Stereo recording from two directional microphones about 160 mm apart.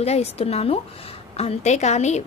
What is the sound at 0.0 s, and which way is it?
A woman's voice, 40° left (ahead or behind).